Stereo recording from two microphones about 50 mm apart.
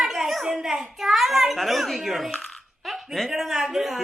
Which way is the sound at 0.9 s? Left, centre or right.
Centre.